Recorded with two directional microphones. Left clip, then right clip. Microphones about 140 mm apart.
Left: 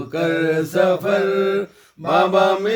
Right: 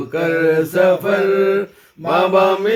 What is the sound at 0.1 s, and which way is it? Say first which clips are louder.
Mantra: right 3 dB; 50° left (ahead or behind).